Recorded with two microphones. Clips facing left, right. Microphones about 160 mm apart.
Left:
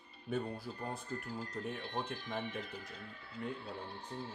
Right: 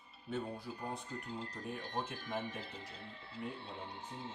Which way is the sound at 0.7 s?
15° right (ahead or behind).